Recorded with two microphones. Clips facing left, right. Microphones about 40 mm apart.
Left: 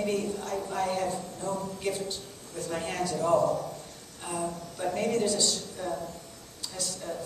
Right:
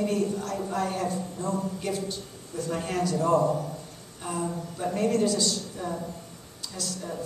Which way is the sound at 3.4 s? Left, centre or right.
Right.